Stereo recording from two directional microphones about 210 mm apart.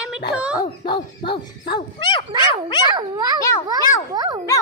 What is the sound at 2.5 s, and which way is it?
Cat, 20° left (ahead or behind).